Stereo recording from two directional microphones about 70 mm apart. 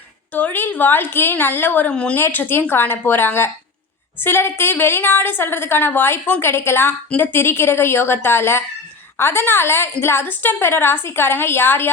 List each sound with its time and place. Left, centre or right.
0.3 s a woman's voice: left
1.9 s speech: centre
2.1 s a woman's voice: left